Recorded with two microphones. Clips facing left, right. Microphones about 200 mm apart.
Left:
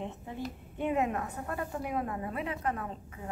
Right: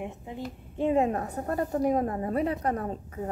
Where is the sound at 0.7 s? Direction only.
30° right (ahead or behind).